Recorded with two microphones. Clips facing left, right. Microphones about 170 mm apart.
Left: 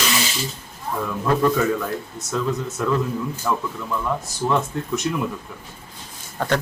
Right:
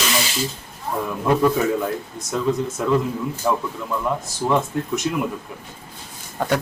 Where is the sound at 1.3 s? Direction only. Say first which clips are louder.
Right 2 dB; 10° right (ahead or behind).